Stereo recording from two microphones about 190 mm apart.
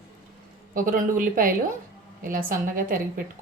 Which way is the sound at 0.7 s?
45° right (ahead or behind).